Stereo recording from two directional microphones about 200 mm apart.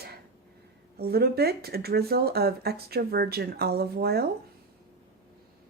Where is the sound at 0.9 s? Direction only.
50° right (ahead or behind).